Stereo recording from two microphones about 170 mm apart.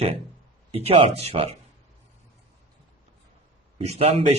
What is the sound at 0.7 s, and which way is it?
Speech, 35° right (ahead or behind).